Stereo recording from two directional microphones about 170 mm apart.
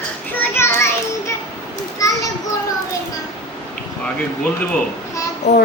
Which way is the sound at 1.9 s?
20° left (ahead or behind).